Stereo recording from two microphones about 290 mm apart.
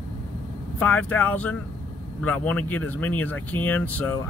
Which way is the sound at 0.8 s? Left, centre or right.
Centre.